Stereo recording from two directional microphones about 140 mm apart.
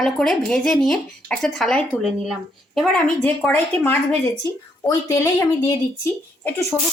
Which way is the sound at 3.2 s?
10° left (ahead or behind).